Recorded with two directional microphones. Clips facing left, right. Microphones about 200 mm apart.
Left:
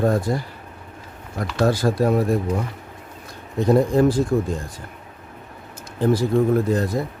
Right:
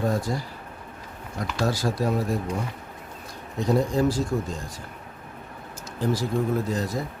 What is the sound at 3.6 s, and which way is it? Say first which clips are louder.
Speech: left 6 dB; 55° left (ahead or behind).